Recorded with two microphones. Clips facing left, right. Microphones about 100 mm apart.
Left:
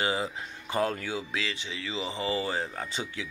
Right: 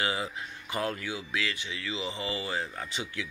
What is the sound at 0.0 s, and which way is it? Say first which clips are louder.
Speech: left 2 dB; 30° left (ahead or behind).